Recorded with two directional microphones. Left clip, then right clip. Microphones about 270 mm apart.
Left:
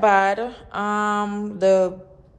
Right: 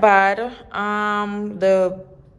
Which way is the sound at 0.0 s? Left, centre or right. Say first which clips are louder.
Right 3 dB; centre.